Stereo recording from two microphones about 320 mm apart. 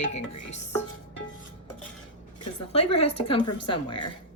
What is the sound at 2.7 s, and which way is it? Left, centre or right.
A woman's voice, centre.